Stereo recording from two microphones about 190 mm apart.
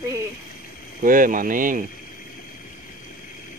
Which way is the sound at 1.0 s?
45° right (ahead or behind).